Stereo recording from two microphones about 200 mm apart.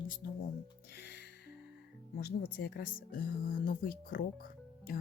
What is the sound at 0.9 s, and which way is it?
Music, 55° left (ahead or behind).